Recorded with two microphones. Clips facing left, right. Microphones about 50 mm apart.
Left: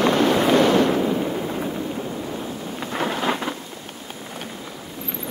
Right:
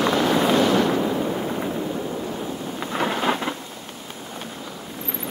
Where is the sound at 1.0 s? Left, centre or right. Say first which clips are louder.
Left 1 dB; centre.